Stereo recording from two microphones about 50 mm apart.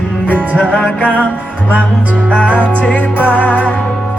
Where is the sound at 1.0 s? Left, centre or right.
Left.